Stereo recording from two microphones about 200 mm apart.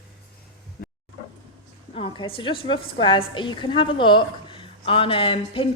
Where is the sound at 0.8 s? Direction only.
50° left (ahead or behind).